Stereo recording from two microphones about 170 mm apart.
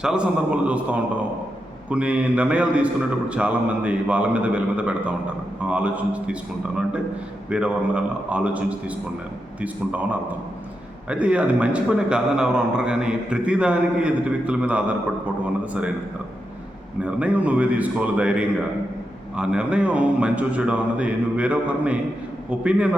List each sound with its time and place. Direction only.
0.0 s speech: 5° right (ahead or behind)
7.5 s speech: 5° right (ahead or behind)
17.0 s speech: 5° right (ahead or behind)